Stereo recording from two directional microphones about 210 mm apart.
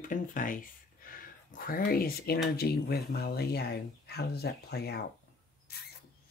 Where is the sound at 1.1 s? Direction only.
45° left (ahead or behind).